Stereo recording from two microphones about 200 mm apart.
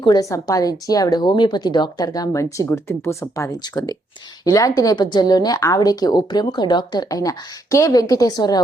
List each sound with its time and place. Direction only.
0.0 s a woman's voice: 20° left (ahead or behind)